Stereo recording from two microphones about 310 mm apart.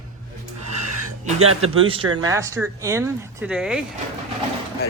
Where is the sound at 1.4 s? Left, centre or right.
Right.